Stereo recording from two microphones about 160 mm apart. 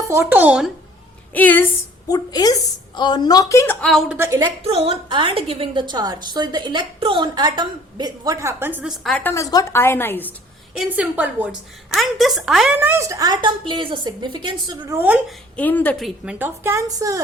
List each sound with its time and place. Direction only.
0.1 s a woman's voice: 15° right (ahead or behind)
1.3 s a woman's voice: 10° left (ahead or behind)
2.0 s a woman's voice: 25° left (ahead or behind); by 4.2 s 5° left (ahead or behind)
4.2 s a woman's voice: 15° right (ahead or behind)
4.6 s a woman's voice: 40° right (ahead or behind); by 9.0 s 10° right (ahead or behind)
9.0 s a woman's voice: 10° left (ahead or behind)
10.8 s a woman's voice: 10° right (ahead or behind)
12.7 s a woman's voice: 15° right (ahead or behind)
14.9 s a woman's voice: 10° right (ahead or behind)
15.5 s a woman's voice: 10° left (ahead or behind)
16.0 s a woman's voice: 5° right (ahead or behind); by 17.2 s 20° right (ahead or behind)